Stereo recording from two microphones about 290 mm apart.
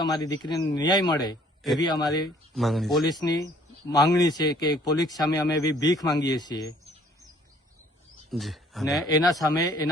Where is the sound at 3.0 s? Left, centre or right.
Centre.